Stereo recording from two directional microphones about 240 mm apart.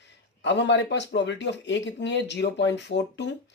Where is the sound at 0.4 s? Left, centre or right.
Left.